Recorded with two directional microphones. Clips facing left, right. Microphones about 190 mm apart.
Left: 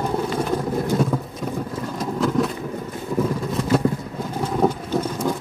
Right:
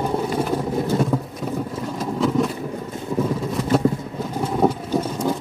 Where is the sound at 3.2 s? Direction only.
Centre (ahead or behind).